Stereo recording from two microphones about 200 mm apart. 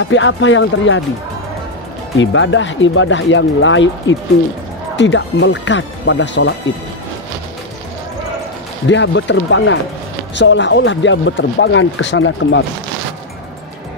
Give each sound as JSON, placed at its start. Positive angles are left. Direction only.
{"t": 0.0, "sound": "speech", "side_deg": 70}
{"t": 2.1, "sound": "speech", "side_deg": 70}
{"t": 8.8, "sound": "speech", "side_deg": 65}